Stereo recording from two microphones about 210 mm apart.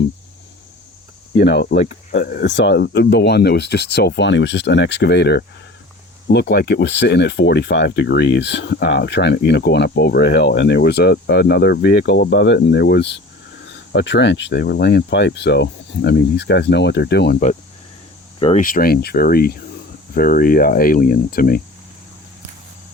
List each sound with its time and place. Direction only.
1.4 s speech: 55° left (ahead or behind)
1.8 s speech: 40° left (ahead or behind)
18.3 s speech: 30° left (ahead or behind)
18.6 s speech: 45° left (ahead or behind)